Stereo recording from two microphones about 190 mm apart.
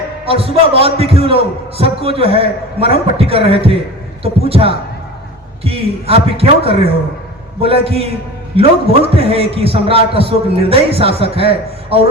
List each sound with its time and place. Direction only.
0.3 s a man's voice: 30° right (ahead or behind)